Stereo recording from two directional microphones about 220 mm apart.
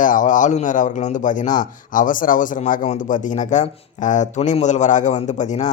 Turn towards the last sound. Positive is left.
turn(degrees=35)  # may be behind; listen again after turning